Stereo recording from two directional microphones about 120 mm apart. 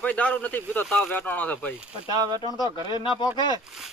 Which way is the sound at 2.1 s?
35° right (ahead or behind).